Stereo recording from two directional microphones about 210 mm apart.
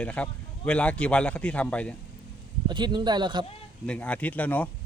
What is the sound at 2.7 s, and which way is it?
Speech, 20° right (ahead or behind).